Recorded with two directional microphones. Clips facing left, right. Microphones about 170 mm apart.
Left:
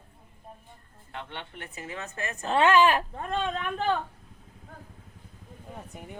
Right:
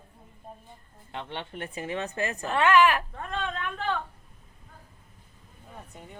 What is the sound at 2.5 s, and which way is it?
Speech, 30° left (ahead or behind).